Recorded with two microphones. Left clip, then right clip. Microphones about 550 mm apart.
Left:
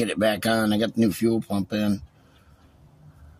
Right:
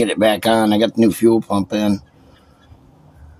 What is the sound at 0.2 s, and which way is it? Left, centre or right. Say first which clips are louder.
Speech: right 7 dB; left.